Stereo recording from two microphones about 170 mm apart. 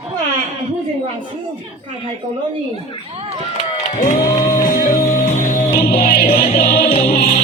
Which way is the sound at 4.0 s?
50° left (ahead or behind).